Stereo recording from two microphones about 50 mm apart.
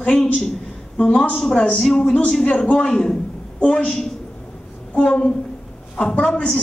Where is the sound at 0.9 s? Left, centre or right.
Centre.